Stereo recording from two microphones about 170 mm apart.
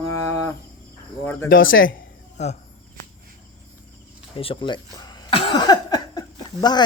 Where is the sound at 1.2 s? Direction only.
10° left (ahead or behind).